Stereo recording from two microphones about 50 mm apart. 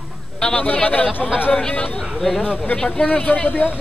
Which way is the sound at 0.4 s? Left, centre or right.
Centre.